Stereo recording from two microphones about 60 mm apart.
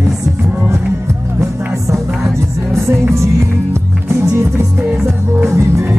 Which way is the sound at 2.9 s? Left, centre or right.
Right.